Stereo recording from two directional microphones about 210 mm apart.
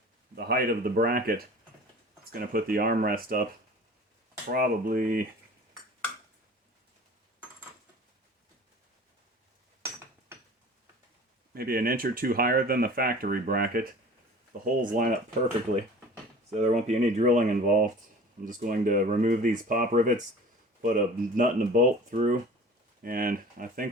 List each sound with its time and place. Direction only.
0.3 s speech: 45° right (ahead or behind)
4.5 s speech: 40° right (ahead or behind)
11.5 s speech: 45° right (ahead or behind)
16.6 s speech: 35° right (ahead or behind)